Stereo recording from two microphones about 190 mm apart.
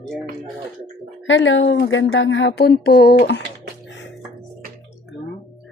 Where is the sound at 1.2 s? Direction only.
75° left (ahead or behind); by 3.1 s 60° left (ahead or behind).